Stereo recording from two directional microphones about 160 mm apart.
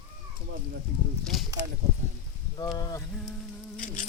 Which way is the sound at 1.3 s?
Centre (ahead or behind).